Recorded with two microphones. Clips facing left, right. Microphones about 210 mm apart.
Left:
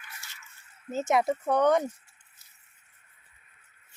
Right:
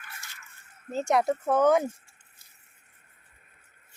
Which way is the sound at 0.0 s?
55° right (ahead or behind).